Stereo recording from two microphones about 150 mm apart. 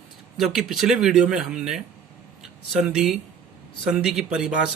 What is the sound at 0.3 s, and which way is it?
Speech, centre (ahead or behind).